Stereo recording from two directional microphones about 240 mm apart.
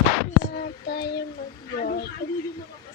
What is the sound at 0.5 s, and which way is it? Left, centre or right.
Child singing, left.